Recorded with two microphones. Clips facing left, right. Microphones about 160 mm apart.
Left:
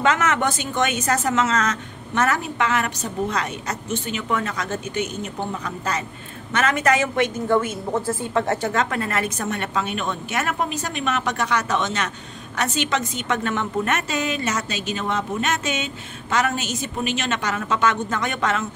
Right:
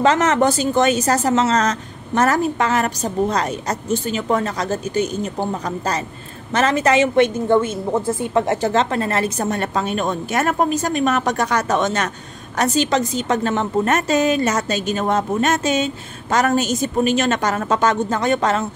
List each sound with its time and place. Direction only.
0.0 s a woman's voice: 35° right (ahead or behind); by 8.5 s 15° right (ahead or behind)
8.5 s a woman's voice: 30° right (ahead or behind)